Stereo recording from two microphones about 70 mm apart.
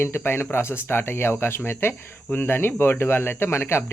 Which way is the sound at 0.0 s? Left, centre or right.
Left.